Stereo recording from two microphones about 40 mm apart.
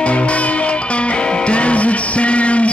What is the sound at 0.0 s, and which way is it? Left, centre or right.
Music, left.